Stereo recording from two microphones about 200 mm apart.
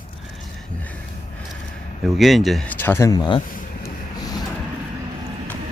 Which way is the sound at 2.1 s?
Centre (ahead or behind).